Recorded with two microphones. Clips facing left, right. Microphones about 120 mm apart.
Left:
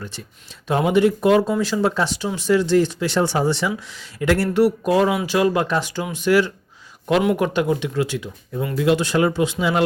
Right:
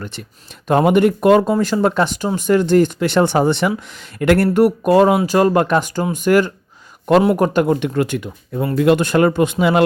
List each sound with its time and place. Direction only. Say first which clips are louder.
0.0 s speech: right 4 dB; 65° right (ahead or behind)